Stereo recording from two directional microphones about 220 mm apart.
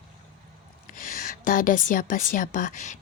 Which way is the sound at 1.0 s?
40° left (ahead or behind).